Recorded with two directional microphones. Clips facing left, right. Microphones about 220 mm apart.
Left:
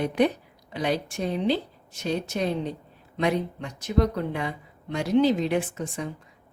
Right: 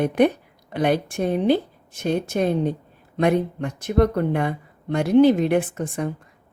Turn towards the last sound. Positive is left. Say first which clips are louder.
# right 5 dB
turn(degrees=-55)  # may be behind; listen again after turning